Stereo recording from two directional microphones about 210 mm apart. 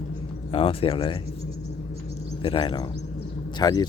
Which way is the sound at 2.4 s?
25° left (ahead or behind).